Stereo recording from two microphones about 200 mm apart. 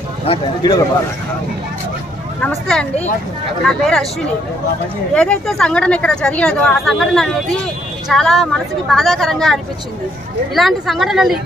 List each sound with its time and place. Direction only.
0.3 s speech: 25° left (ahead or behind)
2.4 s speech: 5° left (ahead or behind)
5.1 s speech: 5° left (ahead or behind)